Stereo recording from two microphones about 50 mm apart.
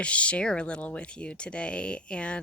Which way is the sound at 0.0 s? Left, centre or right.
Left.